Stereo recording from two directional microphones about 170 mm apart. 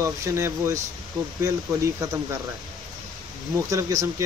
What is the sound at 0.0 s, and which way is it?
Speech, 15° right (ahead or behind).